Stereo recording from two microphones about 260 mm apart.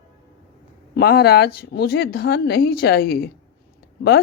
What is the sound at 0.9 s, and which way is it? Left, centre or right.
A woman's voice, left.